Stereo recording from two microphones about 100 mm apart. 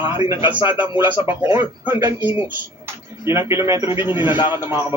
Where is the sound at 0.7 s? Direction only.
20° right (ahead or behind).